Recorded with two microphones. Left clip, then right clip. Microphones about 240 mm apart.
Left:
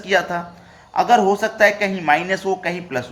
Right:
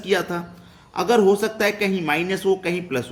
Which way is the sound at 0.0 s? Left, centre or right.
Centre.